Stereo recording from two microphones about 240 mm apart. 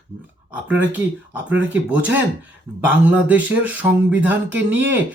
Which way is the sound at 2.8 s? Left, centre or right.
Centre.